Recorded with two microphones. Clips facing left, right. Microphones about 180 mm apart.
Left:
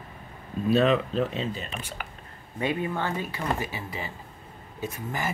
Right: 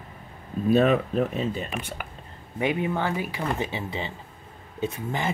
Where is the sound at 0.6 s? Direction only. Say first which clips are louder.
Right 2 dB; 50° right (ahead or behind).